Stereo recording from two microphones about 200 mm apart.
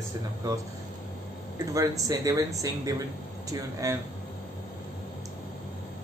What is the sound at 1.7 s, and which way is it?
Speech, 15° right (ahead or behind).